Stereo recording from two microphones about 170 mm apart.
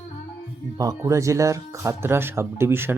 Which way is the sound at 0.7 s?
20° right (ahead or behind).